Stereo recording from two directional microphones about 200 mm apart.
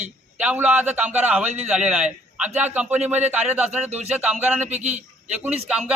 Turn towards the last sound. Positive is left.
turn(degrees=-5)  # may be behind; listen again after turning